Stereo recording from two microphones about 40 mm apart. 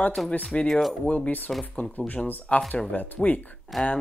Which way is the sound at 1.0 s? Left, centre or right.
Left.